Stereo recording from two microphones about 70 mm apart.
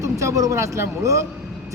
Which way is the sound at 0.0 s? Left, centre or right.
Right.